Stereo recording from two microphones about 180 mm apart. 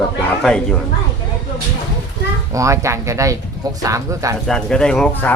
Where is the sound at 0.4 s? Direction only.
5° left (ahead or behind).